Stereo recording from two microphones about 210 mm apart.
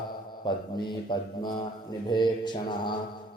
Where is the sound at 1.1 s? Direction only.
20° left (ahead or behind).